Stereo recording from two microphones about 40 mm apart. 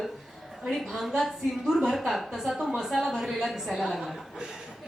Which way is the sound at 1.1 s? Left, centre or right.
Centre.